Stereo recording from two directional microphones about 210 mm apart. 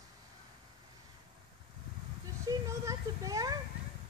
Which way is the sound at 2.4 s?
15° right (ahead or behind).